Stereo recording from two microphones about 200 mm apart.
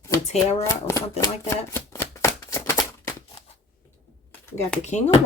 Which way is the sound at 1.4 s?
15° left (ahead or behind).